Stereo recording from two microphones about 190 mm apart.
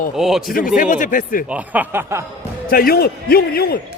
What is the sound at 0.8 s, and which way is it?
Speech, 45° left (ahead or behind).